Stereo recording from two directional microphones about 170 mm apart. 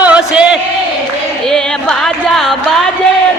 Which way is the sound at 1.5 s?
5° left (ahead or behind).